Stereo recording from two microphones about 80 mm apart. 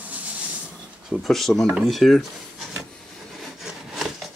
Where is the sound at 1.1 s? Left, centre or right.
Centre.